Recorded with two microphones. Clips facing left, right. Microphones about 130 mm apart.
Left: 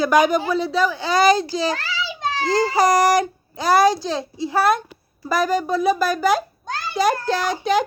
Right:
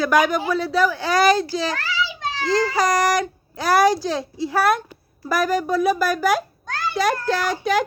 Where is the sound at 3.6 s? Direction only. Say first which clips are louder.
Left 1 dB; 10° right (ahead or behind).